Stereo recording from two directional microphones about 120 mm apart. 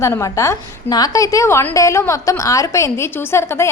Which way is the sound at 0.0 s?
25° left (ahead or behind).